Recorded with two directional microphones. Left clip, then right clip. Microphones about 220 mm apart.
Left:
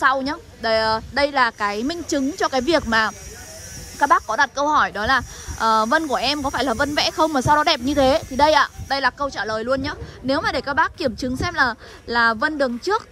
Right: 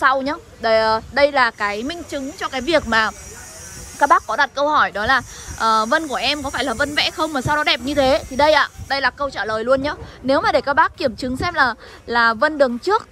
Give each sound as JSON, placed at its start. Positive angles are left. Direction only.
{"t": 0.0, "sound": "speech", "side_deg": 10}
{"t": 2.0, "sound": "speech", "side_deg": 30}
{"t": 2.6, "sound": "speech", "side_deg": 10}